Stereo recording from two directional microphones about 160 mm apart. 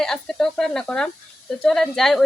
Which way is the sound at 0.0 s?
5° left (ahead or behind).